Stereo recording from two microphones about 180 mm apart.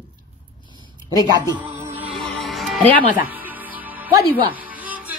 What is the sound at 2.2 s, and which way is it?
Music, centre (ahead or behind).